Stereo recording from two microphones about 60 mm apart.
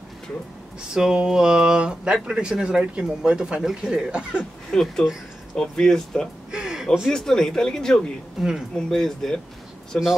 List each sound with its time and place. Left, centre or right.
0.9 s speech: centre
4.6 s speech: centre
6.5 s a sound: centre
7.1 s speech: centre
8.4 s speech: centre
8.7 s speech: centre